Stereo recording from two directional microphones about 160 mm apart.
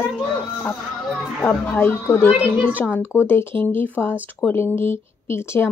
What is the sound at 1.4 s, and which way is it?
Speech, 10° left (ahead or behind).